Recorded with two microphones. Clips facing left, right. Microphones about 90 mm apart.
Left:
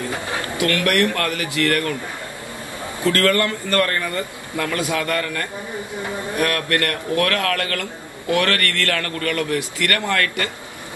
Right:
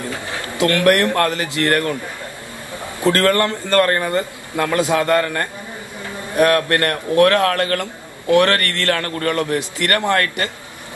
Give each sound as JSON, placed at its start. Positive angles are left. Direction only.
{"t": 0.6, "sound": "a man's voice", "side_deg": -25}
{"t": 3.0, "sound": "a man's voice", "side_deg": -25}